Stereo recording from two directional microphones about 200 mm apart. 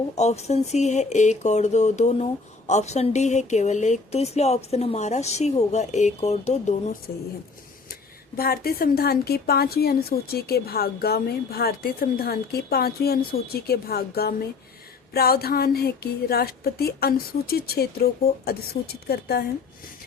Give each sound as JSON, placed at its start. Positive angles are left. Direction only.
{"t": 0.2, "sound": "speech", "side_deg": 35}
{"t": 8.4, "sound": "a woman's voice", "side_deg": 50}